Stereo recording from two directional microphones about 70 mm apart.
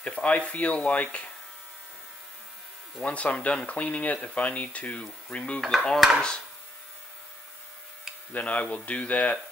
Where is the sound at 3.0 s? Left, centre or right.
Centre.